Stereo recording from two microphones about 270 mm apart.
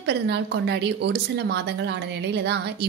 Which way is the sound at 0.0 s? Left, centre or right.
Right.